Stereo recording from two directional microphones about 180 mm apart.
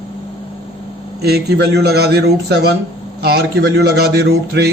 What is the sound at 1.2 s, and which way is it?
A man's voice, 65° right (ahead or behind).